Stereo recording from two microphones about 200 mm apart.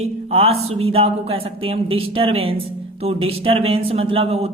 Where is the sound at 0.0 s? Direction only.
30° right (ahead or behind).